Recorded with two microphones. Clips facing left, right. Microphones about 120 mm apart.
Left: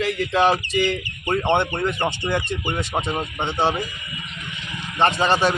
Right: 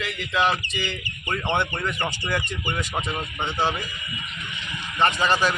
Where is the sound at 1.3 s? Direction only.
25° left (ahead or behind).